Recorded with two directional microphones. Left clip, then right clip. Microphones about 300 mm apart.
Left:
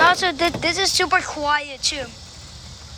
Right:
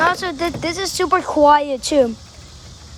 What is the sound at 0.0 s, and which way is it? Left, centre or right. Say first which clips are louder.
Speech: left 2 dB; centre.